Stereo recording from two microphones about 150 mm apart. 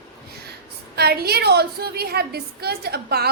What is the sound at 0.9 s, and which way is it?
A woman's voice, 90° right.